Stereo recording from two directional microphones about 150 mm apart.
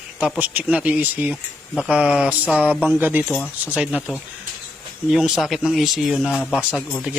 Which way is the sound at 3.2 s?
10° left (ahead or behind).